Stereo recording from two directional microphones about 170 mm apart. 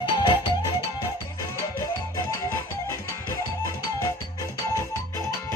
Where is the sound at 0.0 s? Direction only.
25° left (ahead or behind).